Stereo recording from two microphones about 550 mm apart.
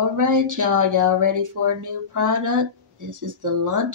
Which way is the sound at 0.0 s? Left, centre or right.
Right.